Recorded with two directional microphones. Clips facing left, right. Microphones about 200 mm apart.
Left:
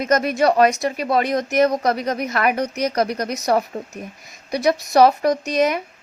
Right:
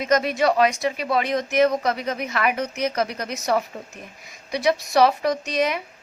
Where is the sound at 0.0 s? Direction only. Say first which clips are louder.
Left 2 dB; 50° left (ahead or behind).